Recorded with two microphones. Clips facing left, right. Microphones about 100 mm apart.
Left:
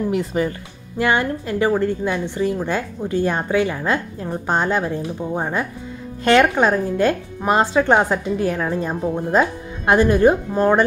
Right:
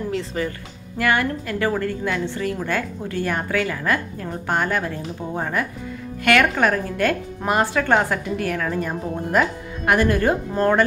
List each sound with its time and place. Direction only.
0.1 s speech: 15° left (ahead or behind)